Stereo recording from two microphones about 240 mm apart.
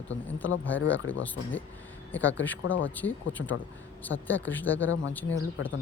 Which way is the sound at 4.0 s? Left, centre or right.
Centre.